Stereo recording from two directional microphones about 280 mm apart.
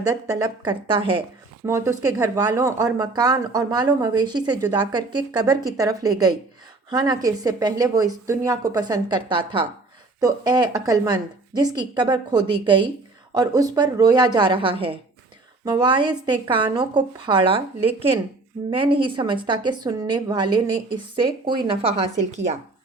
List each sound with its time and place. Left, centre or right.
0.0 s a woman's voice: centre
18.9 s a woman's voice: centre